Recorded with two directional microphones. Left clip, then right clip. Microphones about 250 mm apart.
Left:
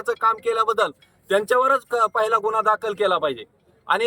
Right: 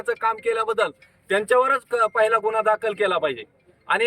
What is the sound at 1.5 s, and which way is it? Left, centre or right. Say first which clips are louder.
Speech: right 1 dB; centre.